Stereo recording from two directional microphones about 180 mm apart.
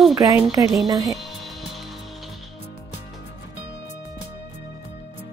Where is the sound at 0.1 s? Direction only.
20° right (ahead or behind).